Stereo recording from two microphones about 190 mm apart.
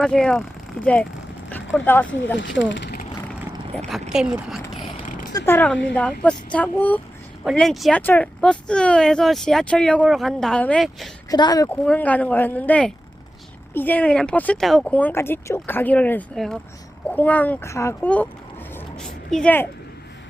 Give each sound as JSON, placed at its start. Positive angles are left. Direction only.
{"t": 0.0, "sound": "speech", "side_deg": 5}
{"t": 1.5, "sound": "vehicle", "side_deg": 10}
{"t": 2.4, "sound": "speech", "side_deg": 75}
{"t": 3.8, "sound": "speech", "side_deg": 0}
{"t": 5.5, "sound": "speech", "side_deg": 10}
{"t": 11.3, "sound": "a woman's voice", "side_deg": 20}
{"t": 11.9, "sound": "speech", "side_deg": 10}
{"t": 18.7, "sound": "a sound", "side_deg": 5}